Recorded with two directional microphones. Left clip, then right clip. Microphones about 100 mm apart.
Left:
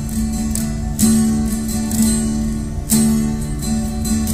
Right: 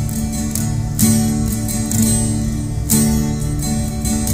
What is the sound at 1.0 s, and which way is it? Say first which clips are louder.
Music: left 1 dB; 50° left (ahead or behind).